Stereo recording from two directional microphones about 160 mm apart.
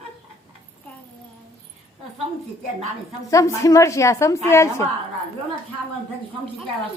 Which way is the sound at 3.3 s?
20° left (ahead or behind).